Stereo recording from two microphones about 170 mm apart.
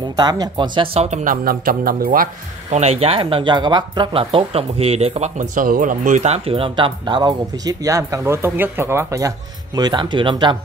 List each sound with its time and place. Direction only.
0.1 s speech: 25° right (ahead or behind); by 2.2 s 60° right (ahead or behind)
2.7 s speech: 35° right (ahead or behind)